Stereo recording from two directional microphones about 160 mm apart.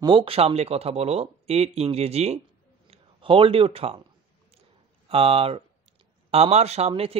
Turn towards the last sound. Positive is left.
turn(degrees=-35)  # may be behind; listen again after turning